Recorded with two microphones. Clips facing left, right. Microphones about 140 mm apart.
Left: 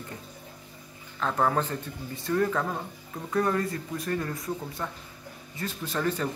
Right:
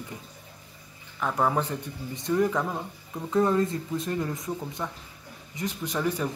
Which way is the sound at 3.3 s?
20° right (ahead or behind).